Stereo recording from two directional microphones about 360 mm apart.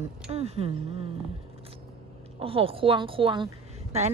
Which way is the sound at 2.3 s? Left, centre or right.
Centre.